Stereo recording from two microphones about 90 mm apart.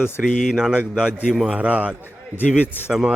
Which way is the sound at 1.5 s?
15° right (ahead or behind).